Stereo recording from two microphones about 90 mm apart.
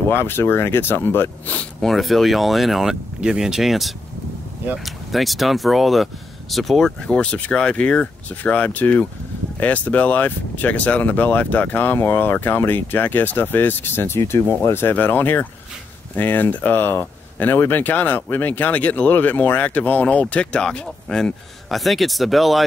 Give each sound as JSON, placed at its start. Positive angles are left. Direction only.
{"t": 0.1, "sound": "speech", "side_deg": 25}
{"t": 1.8, "sound": "speech", "side_deg": 0}
{"t": 7.0, "sound": "speech", "side_deg": 10}